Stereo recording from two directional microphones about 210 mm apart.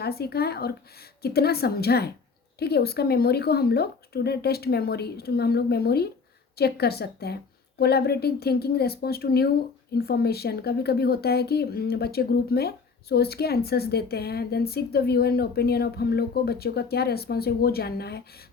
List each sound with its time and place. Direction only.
0.0 s speech: 50° left (ahead or behind)